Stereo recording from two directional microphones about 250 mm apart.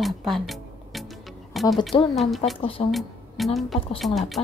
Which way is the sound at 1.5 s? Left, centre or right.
Centre.